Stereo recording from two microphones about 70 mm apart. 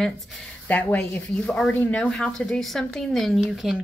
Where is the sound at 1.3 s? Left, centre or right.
Centre.